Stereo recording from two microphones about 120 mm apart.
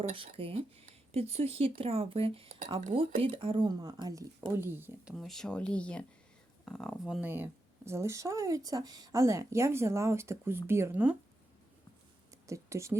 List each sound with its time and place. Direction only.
0.2 s speech: 50° right (ahead or behind); by 4.9 s 20° right (ahead or behind)
5.1 s speech: 5° left (ahead or behind)
7.3 s speech: 15° right (ahead or behind)
12.5 s speech: 25° right (ahead or behind)